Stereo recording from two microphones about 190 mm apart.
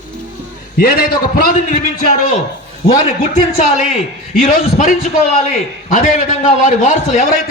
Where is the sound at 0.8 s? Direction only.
50° left (ahead or behind).